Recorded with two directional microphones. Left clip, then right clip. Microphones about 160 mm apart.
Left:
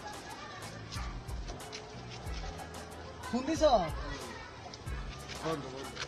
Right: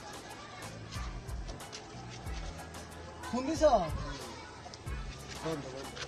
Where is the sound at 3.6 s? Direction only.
Centre (ahead or behind).